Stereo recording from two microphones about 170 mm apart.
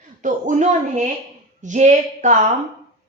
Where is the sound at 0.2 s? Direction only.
50° right (ahead or behind).